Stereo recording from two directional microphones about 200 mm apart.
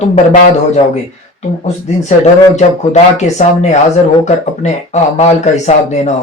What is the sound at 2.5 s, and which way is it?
Speech, 35° left (ahead or behind).